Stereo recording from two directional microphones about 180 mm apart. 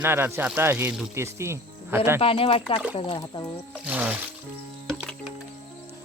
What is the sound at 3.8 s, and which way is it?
Speech, 10° right (ahead or behind).